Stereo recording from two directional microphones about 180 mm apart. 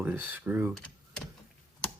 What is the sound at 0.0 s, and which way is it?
Speech, 10° right (ahead or behind).